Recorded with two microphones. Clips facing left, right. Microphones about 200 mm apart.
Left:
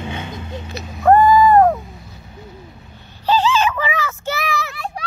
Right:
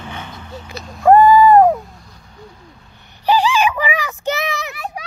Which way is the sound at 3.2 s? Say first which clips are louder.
Right 1 dB; 15° right (ahead or behind).